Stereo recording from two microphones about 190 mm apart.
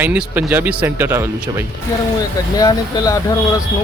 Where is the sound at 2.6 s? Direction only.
20° left (ahead or behind).